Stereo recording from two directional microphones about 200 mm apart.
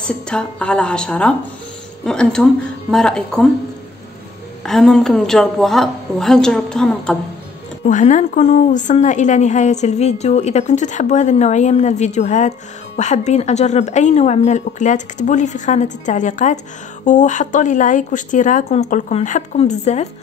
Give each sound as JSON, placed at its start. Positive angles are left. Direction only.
{"t": 0.0, "sound": "a woman's voice", "side_deg": 5}
{"t": 4.6, "sound": "a woman's voice", "side_deg": 0}
{"t": 7.8, "sound": "a woman's voice", "side_deg": 40}